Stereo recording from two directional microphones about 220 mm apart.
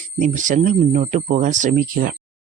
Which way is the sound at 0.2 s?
35° right (ahead or behind).